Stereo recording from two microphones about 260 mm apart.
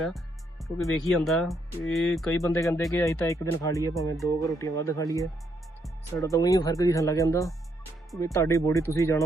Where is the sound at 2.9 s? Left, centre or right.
Centre.